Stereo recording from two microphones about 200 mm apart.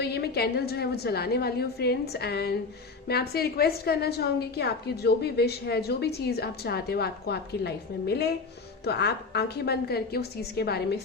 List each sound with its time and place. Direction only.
0.0 s a woman's voice: 55° left (ahead or behind)